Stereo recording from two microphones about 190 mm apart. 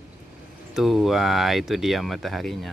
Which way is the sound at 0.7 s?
Centre (ahead or behind).